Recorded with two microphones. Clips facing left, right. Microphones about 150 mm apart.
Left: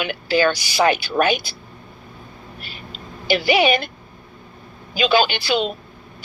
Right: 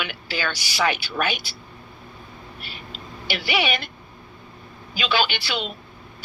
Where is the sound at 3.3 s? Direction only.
45° left (ahead or behind).